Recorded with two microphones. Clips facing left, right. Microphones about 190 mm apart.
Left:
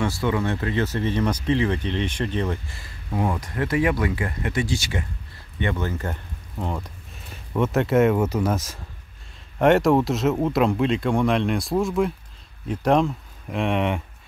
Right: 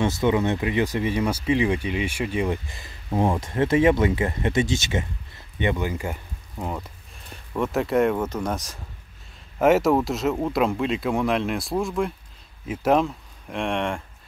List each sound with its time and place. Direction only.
0.0 s speech: 20° right (ahead or behind)
6.6 s speech: centre (ahead or behind)